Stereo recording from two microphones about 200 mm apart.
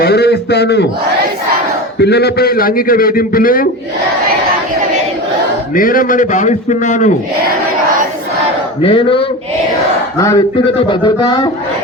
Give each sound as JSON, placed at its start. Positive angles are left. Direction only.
{"t": 0.0, "sound": "a man's voice", "side_deg": 55}
{"t": 2.0, "sound": "a man's voice", "side_deg": 55}
{"t": 5.7, "sound": "a man's voice", "side_deg": 45}
{"t": 8.8, "sound": "speech", "side_deg": 25}
{"t": 10.2, "sound": "speech", "side_deg": 15}